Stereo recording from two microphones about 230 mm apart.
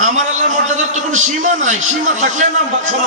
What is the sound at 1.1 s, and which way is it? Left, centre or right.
A man's voice, right.